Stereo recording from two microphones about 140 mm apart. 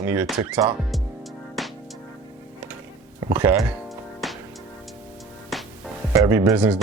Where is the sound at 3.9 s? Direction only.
Centre (ahead or behind).